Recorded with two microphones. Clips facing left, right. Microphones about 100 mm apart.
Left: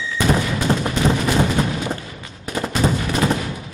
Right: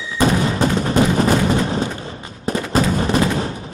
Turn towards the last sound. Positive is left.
turn(degrees=-40)  # may be behind; listen again after turning